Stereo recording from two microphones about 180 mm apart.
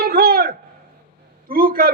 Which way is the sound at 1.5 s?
55° right (ahead or behind).